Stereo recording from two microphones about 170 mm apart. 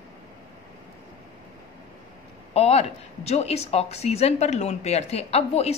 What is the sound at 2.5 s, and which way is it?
Speech, 35° left (ahead or behind).